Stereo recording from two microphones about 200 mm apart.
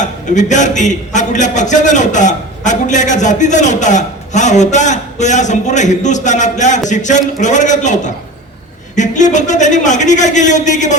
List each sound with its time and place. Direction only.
0.0 s a man's voice: 40° left (ahead or behind)